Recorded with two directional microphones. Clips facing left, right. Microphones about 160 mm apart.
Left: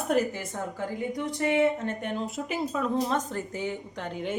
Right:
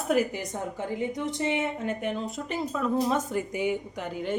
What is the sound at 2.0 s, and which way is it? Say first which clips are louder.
Speech: even; centre (ahead or behind).